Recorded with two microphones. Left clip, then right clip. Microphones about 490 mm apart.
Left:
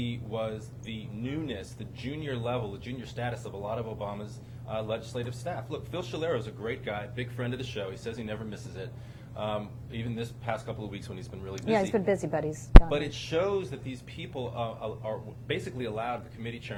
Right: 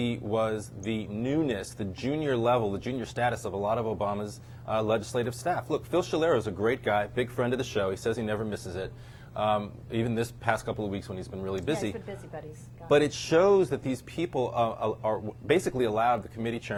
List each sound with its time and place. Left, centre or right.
0.0 s speech: right
11.9 s a woman's voice: left
12.9 s speech: right